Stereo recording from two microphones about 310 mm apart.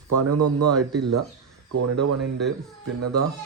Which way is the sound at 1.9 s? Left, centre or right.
Right.